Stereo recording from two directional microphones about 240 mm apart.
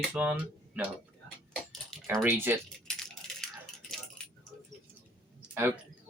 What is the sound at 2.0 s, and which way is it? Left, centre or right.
Speech, centre.